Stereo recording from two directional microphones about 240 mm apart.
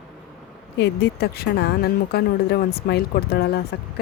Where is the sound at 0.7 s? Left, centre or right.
Left.